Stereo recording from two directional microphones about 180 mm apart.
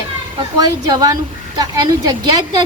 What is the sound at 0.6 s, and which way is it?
A man's voice, 20° right (ahead or behind).